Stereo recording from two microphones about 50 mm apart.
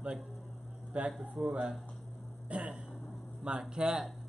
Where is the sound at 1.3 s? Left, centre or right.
Right.